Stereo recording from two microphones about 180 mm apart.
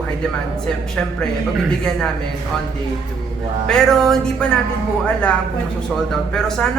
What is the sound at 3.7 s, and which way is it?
A woman's voice, centre (ahead or behind).